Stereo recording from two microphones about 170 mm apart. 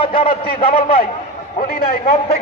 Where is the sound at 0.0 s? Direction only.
30° left (ahead or behind).